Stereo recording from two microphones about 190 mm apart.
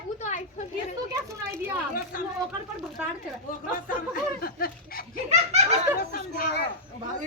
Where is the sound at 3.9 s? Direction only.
50° left (ahead or behind).